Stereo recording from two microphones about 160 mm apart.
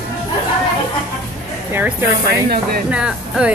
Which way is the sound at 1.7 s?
15° right (ahead or behind).